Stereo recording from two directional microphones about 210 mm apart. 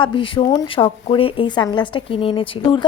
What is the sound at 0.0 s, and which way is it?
A woman's voice, 25° left (ahead or behind).